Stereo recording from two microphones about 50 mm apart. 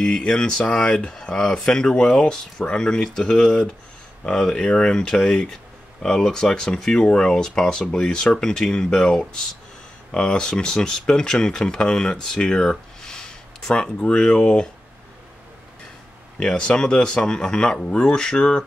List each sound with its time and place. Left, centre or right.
0.0 s speech: centre
16.3 s speech: centre